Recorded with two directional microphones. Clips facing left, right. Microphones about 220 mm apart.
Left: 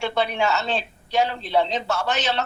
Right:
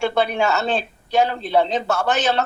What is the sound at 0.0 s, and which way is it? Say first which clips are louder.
A woman's voice: right 4 dB; 50° right (ahead or behind).